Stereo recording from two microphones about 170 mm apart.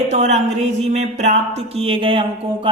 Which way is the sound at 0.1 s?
45° right (ahead or behind).